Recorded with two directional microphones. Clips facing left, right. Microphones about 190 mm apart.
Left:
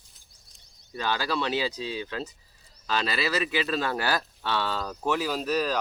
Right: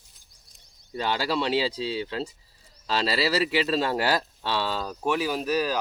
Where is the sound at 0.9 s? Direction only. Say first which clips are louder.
Right 2 dB; 25° right (ahead or behind).